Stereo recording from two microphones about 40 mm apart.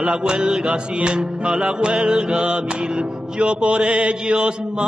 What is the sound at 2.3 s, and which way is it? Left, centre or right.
Mantra, right.